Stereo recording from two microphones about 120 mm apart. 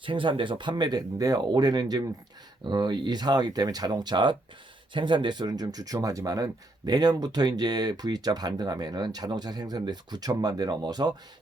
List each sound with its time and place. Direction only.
0.0 s speech: 45° right (ahead or behind)